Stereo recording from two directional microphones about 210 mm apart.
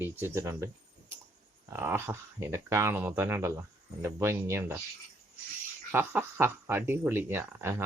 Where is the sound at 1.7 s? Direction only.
10° right (ahead or behind).